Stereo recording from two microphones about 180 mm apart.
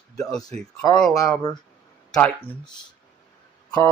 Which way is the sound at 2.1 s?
10° left (ahead or behind).